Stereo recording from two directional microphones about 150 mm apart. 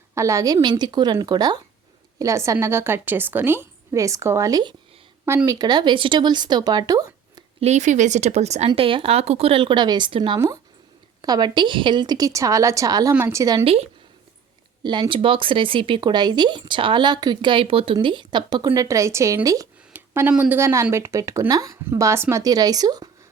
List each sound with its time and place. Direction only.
0.1 s speech: 20° right (ahead or behind)
7.6 s a woman's voice: 50° right (ahead or behind)
10.3 s speech: 20° right (ahead or behind)
14.8 s speech: 30° right (ahead or behind)